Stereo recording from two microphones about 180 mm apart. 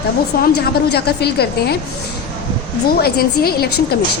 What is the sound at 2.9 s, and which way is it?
A woman's voice, 60° left (ahead or behind).